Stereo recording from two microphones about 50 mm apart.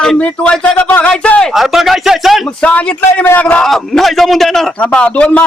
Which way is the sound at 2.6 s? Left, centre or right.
Left.